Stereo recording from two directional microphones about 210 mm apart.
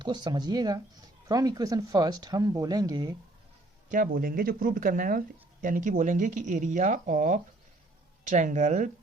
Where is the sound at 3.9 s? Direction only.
40° right (ahead or behind).